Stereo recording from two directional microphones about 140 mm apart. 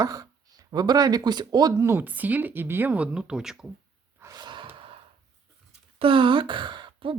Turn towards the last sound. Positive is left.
turn(degrees=-35)  # may be behind; listen again after turning